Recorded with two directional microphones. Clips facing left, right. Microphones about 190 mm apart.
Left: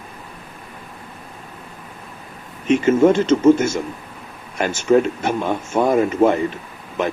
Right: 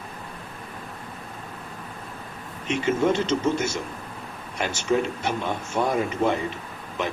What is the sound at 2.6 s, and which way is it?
Speech, 50° left (ahead or behind).